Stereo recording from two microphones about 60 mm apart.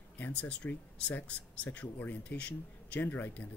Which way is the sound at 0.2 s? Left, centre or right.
Left.